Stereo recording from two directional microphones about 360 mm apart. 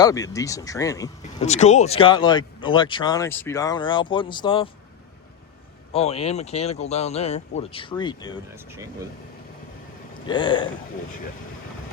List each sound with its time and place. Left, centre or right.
0.0 s speech: centre
5.9 s speech: centre
8.5 s speech: centre
10.2 s speech: centre